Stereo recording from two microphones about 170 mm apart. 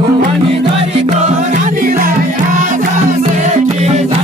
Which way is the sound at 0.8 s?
40° right (ahead or behind).